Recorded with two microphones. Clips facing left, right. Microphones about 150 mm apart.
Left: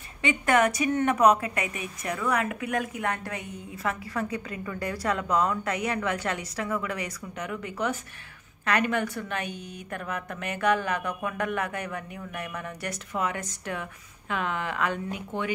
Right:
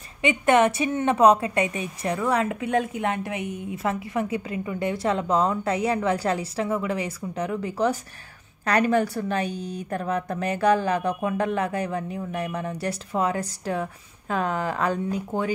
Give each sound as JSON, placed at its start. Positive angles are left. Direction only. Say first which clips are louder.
{"t": 0.2, "sound": "a woman's voice", "louder": "right 4 dB", "side_deg": -20}